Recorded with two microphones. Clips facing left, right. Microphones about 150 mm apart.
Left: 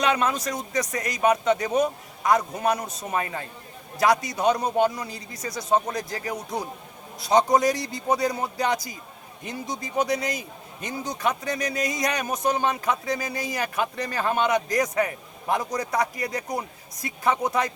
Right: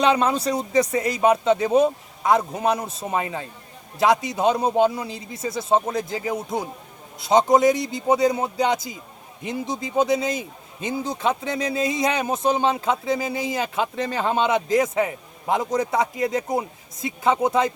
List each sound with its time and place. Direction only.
0.0 s speech: 25° right (ahead or behind)